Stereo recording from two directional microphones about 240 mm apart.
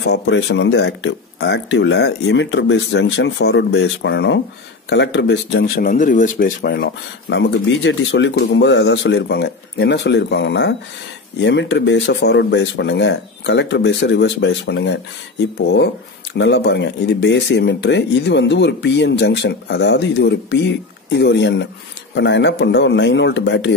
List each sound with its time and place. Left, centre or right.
0.0 s speech: left